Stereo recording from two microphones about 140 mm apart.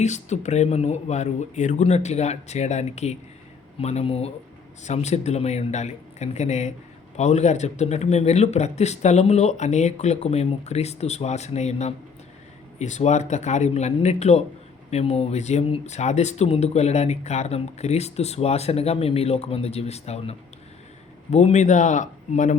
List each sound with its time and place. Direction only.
0.0 s speech: 55° left (ahead or behind)